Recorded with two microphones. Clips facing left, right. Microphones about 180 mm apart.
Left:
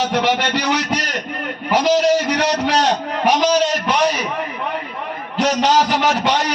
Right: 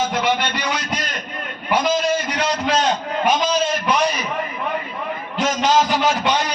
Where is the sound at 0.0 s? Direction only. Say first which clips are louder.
Left 2 dB; 80° left.